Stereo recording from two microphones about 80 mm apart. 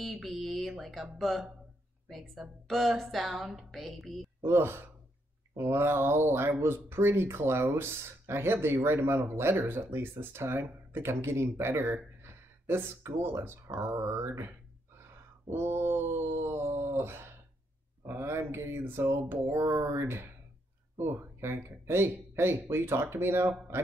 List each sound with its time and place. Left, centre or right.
0.0 s a sound: centre
1.1 s speech: centre
4.4 s speech: right
15.5 s speech: right